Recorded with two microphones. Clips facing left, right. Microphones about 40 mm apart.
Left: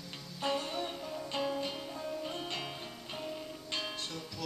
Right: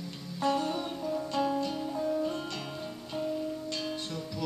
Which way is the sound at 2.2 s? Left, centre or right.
Centre.